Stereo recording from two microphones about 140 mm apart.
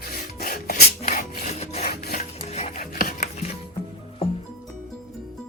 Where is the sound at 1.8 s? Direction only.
90° left.